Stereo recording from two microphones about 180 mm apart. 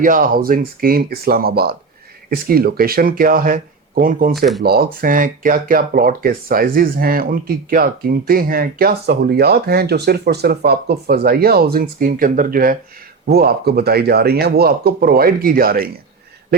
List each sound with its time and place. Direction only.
0.0 s speech: 50° right (ahead or behind)